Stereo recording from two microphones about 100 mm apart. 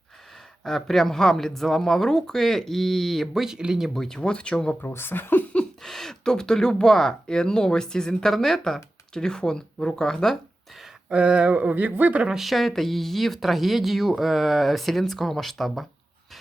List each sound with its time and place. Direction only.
0.6 s speech: 5° left (ahead or behind)
4.8 s speech: 20° left (ahead or behind)
5.8 s speech: 5° left (ahead or behind)
10.8 s speech: 10° right (ahead or behind)